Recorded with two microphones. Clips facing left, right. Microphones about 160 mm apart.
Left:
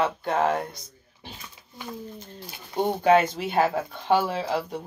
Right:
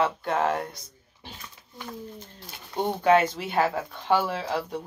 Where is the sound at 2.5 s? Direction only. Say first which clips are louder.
Left 2 dB; 15° left (ahead or behind).